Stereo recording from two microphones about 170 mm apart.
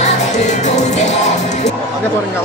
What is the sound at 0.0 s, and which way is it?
Music, 45° left (ahead or behind).